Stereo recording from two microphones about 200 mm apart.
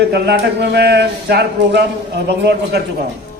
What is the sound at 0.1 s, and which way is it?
Speech, 55° right (ahead or behind).